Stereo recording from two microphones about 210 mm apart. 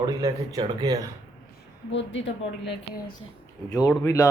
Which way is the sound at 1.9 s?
60° left (ahead or behind).